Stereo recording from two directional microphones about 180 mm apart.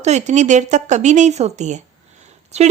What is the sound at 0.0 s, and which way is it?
A woman's voice, 40° right (ahead or behind).